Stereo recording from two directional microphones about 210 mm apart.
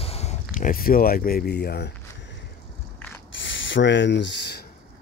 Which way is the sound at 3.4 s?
60° left (ahead or behind).